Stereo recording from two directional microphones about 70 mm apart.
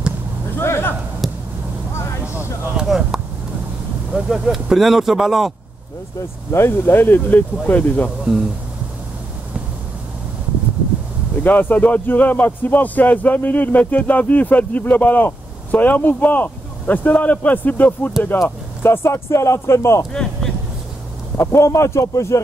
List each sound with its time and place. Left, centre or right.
0.6 s a sound: left
1.2 s a sound: centre
2.9 s a sound: centre
4.1 s speech: centre
6.5 s a man's voice: left
11.4 s a man's voice: left
18.8 s a man's voice: left
20.1 s speech: centre
21.5 s a man's voice: left